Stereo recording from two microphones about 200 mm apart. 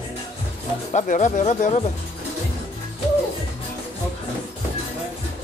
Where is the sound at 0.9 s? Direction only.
35° left (ahead or behind).